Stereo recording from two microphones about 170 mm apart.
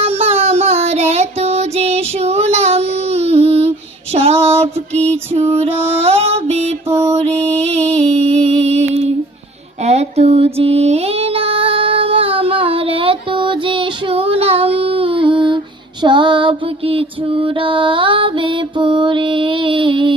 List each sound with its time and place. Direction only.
0.0 s music: 35° right (ahead or behind)
4.1 s female singing: 40° right (ahead or behind)
4.4 s music: 35° right (ahead or behind)
6.0 s music: 35° right (ahead or behind)
6.8 s mantra: 15° right (ahead or behind)
7.1 s music: 40° right (ahead or behind)
9.8 s female singing: 40° right (ahead or behind)